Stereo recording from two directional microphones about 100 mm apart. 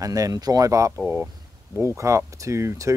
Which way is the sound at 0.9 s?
20° right (ahead or behind).